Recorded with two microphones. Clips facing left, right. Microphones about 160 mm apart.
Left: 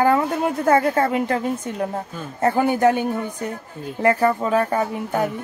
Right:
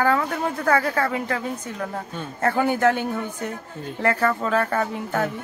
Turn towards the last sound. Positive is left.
turn(degrees=15)  # may be behind; listen again after turning